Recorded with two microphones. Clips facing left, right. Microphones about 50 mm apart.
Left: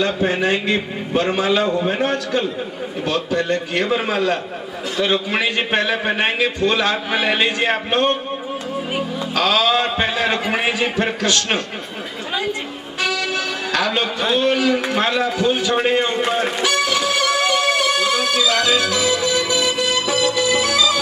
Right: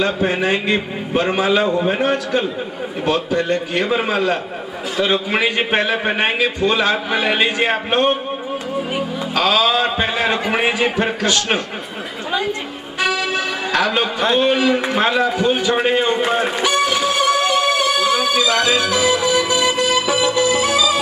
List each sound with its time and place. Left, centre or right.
0.0 s a man's voice: centre
9.3 s a man's voice: centre
13.0 s music: centre
14.4 s a sound: centre